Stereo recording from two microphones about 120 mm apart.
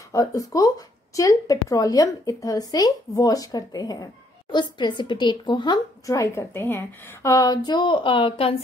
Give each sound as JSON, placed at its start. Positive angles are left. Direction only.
{"t": 0.1, "sound": "speech", "side_deg": 30}
{"t": 6.1, "sound": "a woman's voice", "side_deg": 25}
{"t": 7.3, "sound": "a sound", "side_deg": 35}